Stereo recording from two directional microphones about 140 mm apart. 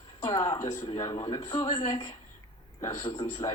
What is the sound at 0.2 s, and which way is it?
A man's voice, 25° left (ahead or behind).